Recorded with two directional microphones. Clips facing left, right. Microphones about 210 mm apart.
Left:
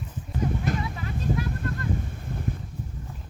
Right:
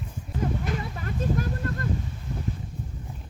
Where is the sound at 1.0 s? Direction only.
50° right (ahead or behind).